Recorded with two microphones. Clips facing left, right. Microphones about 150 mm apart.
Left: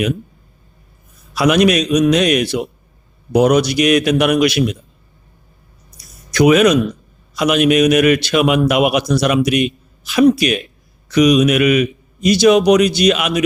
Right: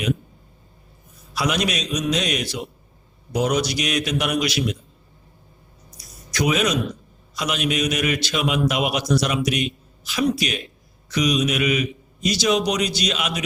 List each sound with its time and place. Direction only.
1.3 s a man's voice: 60° left (ahead or behind)
6.3 s a man's voice: 65° left (ahead or behind)